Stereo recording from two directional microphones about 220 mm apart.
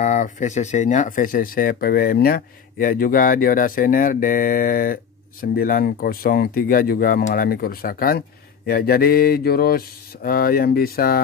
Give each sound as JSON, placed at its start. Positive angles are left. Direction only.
{"t": 0.0, "sound": "speech", "side_deg": 35}